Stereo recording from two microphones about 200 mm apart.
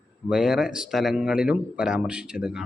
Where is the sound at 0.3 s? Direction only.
5° right (ahead or behind).